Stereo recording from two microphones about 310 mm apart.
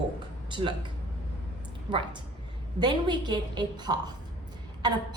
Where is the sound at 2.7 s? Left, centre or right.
Centre.